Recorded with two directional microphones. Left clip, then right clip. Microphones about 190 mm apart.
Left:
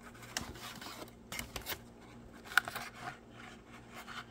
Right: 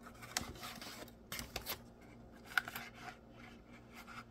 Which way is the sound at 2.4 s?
25° left (ahead or behind).